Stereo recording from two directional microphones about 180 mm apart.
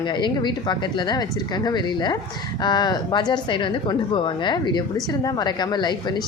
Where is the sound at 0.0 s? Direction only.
25° left (ahead or behind).